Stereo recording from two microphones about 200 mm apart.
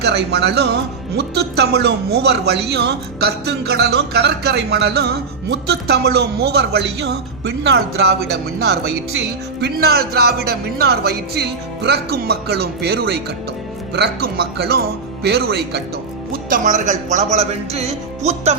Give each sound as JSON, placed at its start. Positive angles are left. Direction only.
{"t": 0.0, "sound": "a man's voice", "side_deg": -55}
{"t": 16.3, "sound": "speech", "side_deg": -40}